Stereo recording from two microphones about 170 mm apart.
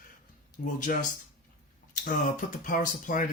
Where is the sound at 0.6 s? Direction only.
60° left (ahead or behind).